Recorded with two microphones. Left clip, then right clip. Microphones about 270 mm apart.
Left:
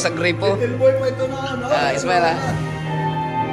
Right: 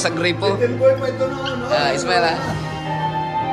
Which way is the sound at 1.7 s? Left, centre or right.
Centre.